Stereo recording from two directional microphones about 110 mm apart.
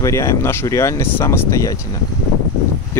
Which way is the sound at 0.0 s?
25° left (ahead or behind).